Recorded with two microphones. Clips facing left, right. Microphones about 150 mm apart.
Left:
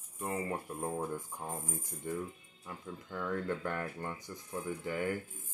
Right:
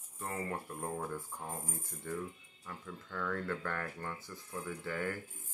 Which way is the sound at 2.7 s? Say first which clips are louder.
Left 2 dB; 15° left (ahead or behind).